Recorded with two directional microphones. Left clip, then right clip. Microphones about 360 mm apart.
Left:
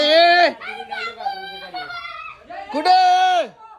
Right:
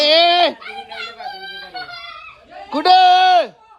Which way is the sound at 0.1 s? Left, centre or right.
Right.